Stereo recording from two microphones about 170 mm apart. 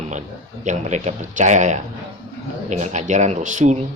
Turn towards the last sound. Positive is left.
turn(degrees=-45)  # may be behind; listen again after turning